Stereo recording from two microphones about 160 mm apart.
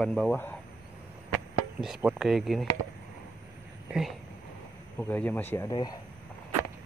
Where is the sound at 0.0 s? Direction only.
Centre (ahead or behind).